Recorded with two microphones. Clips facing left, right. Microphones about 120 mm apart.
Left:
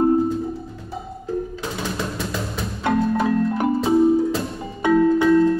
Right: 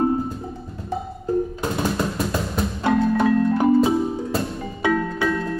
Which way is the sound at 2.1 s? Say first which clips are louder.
Right 3 dB; centre (ahead or behind).